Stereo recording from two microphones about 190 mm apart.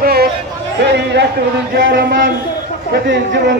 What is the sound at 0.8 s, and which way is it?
A man's voice, 65° right (ahead or behind).